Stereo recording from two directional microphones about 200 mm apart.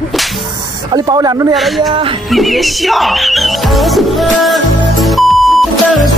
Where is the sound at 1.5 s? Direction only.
Centre (ahead or behind).